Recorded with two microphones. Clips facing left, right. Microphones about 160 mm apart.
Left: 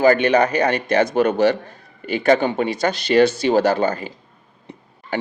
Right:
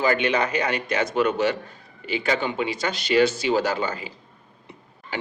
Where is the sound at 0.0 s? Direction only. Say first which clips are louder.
Left 7 dB; 40° left (ahead or behind).